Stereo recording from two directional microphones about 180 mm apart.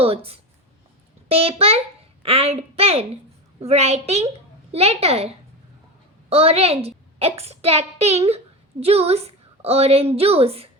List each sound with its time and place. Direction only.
0.0 s a child's voice: 35° right (ahead or behind)
6.3 s a child's voice: 35° right (ahead or behind)